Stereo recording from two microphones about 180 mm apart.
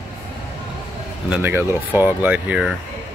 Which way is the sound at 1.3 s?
10° right (ahead or behind).